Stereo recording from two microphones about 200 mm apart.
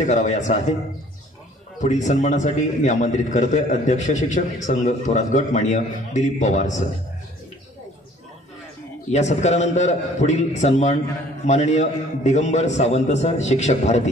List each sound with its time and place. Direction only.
0.0 s a man's voice: 35° left (ahead or behind)
1.8 s a man's voice: 35° left (ahead or behind)
9.1 s a man's voice: 35° left (ahead or behind)